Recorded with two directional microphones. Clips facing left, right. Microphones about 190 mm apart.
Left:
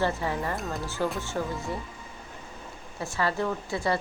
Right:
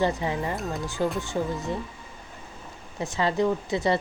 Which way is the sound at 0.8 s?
15° right (ahead or behind).